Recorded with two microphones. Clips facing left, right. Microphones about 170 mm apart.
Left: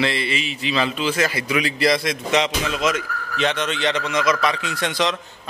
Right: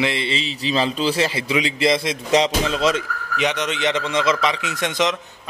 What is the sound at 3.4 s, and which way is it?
A man's voice, 15° right (ahead or behind).